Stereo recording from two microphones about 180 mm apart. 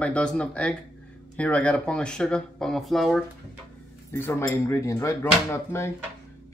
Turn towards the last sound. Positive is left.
turn(degrees=15)  # may be behind; listen again after turning